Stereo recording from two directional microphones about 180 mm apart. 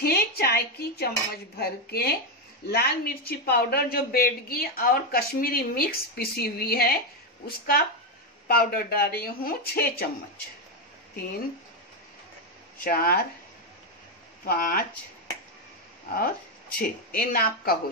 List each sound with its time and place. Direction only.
0.0 s a sound: 60° left (ahead or behind)
2.7 s a woman's voice: 60° left (ahead or behind)
12.8 s a woman's voice: 55° left (ahead or behind)
14.4 s speech: 55° left (ahead or behind)
16.7 s a woman's voice: 55° left (ahead or behind)